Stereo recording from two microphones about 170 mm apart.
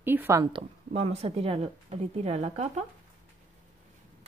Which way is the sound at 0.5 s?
35° right (ahead or behind).